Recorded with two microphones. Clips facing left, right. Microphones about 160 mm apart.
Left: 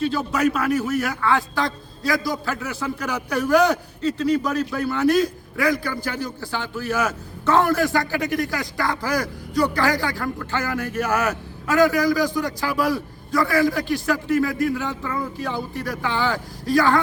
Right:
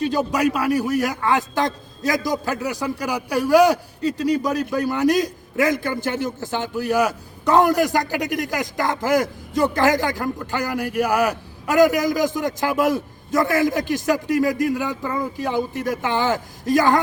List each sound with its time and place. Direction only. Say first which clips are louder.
0.0 s a man's voice: right 1 dB; 15° right (ahead or behind)